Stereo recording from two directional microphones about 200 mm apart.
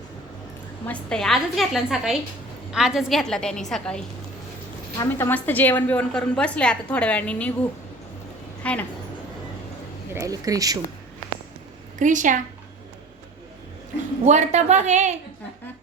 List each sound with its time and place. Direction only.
0.9 s a woman's voice: 5° left (ahead or behind)
8.6 s a woman's voice: 5° left (ahead or behind)
10.2 s speech: 15° right (ahead or behind)
11.9 s a woman's voice: 40° right (ahead or behind)
14.3 s a woman's voice: 35° right (ahead or behind)